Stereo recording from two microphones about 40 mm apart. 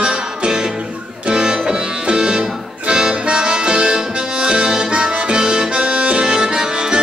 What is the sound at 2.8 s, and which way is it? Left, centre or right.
Accordion, right.